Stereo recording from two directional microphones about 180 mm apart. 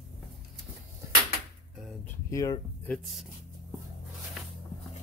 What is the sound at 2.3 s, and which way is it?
Speech, 20° left (ahead or behind).